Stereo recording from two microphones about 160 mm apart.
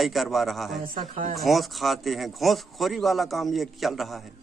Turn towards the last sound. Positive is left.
turn(degrees=0)  # may be behind; listen again after turning